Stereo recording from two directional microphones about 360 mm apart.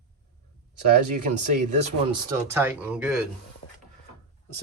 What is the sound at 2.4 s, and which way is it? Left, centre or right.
Speech, centre.